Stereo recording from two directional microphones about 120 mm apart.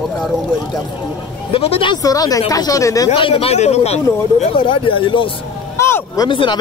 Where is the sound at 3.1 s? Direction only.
50° left (ahead or behind).